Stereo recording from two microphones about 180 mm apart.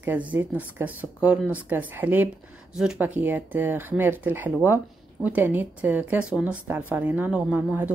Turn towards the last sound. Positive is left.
turn(degrees=-5)  # may be behind; listen again after turning